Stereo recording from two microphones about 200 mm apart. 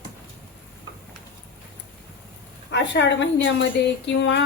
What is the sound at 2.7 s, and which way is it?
A woman's voice, 60° left (ahead or behind).